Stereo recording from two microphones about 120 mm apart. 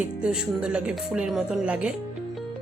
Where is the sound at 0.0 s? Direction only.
10° right (ahead or behind).